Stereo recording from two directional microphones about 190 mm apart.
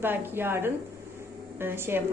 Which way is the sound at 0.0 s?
10° right (ahead or behind).